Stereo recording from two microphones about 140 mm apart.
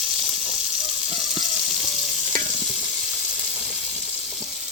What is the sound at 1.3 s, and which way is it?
Water, centre (ahead or behind).